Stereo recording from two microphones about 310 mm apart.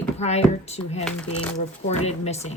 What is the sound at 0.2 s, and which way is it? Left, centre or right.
Speech, left.